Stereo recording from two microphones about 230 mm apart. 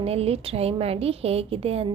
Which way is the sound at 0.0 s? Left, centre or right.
Right.